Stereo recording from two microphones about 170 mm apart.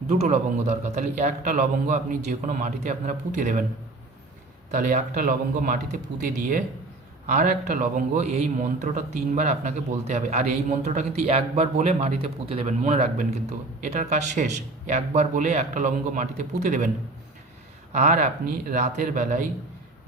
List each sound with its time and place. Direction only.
0.1 s speech: 40° right (ahead or behind)
4.7 s speech: 50° right (ahead or behind)
7.3 s a man's voice: 50° right (ahead or behind)
17.9 s speech: 45° right (ahead or behind)